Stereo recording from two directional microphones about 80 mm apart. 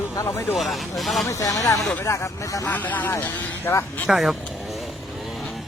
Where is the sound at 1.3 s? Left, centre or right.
Left.